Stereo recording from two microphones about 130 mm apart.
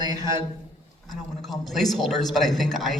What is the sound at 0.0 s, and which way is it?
Speech, 30° right (ahead or behind).